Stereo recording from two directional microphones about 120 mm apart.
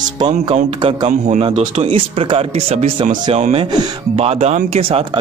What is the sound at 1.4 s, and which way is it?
Speech, 55° right (ahead or behind).